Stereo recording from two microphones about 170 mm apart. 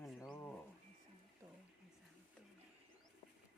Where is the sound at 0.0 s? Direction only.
Centre (ahead or behind).